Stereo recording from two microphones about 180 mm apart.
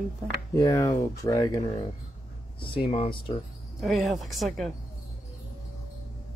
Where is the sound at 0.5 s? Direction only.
20° left (ahead or behind).